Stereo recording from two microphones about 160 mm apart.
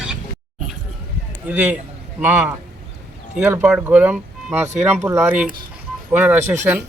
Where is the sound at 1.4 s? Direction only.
10° right (ahead or behind).